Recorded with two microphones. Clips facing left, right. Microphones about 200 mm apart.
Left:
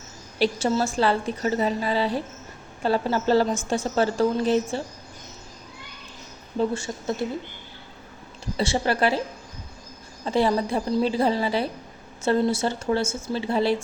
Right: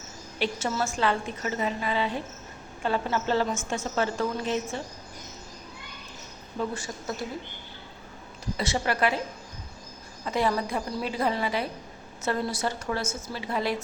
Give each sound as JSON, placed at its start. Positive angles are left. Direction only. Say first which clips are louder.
{"t": 0.3, "sound": "a woman's voice", "louder": "left 6 dB", "side_deg": 35}
{"t": 6.6, "sound": "a woman's voice", "louder": "left 6 dB", "side_deg": 25}
{"t": 8.5, "sound": "a woman's voice", "louder": "left 5 dB", "side_deg": 30}
{"t": 10.2, "sound": "a woman's voice", "louder": "left 5 dB", "side_deg": 30}